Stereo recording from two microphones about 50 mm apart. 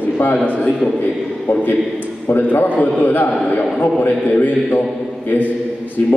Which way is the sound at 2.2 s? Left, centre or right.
Left.